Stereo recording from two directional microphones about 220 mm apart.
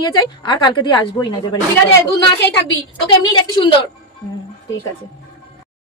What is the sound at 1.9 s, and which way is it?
Speech, 50° left (ahead or behind).